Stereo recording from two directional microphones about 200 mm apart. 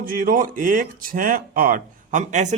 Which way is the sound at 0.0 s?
45° right (ahead or behind).